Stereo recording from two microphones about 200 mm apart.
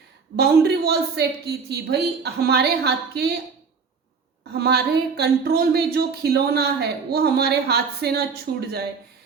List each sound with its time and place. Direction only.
0.3 s speech: 55° right (ahead or behind)
4.5 s speech: 55° right (ahead or behind)